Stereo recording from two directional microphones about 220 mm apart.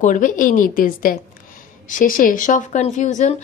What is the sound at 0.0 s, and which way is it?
Speech, 35° left (ahead or behind).